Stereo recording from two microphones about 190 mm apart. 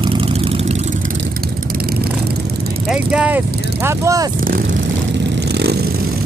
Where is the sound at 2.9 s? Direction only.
5° right (ahead or behind).